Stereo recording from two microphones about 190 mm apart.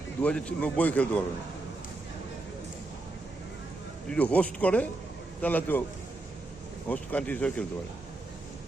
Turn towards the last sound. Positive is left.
turn(degrees=5)  # may be behind; listen again after turning